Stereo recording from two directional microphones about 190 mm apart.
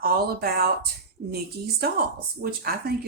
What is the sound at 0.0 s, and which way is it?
Speech, 55° right (ahead or behind).